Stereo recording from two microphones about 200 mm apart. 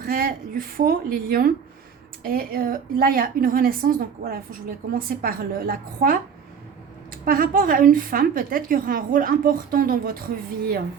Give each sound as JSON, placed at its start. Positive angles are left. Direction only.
{"t": 0.0, "sound": "a woman's voice", "side_deg": -45}
{"t": 7.3, "sound": "a woman's voice", "side_deg": -45}